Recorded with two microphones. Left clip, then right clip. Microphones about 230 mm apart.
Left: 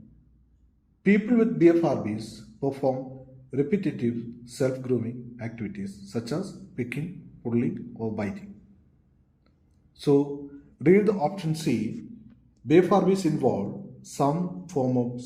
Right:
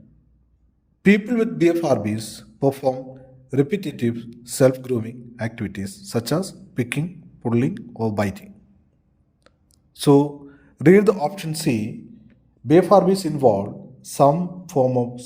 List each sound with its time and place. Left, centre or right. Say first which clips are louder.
1.0 s a man's voice: right 4 dB; right
9.9 s a man's voice: right 6 dB; right